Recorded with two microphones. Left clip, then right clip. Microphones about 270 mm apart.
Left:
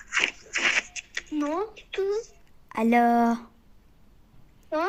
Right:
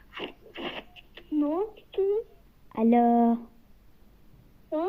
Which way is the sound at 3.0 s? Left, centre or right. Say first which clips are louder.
Left 1 dB; left.